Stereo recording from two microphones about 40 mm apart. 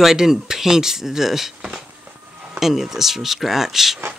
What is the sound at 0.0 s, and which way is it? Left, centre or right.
Speech, centre.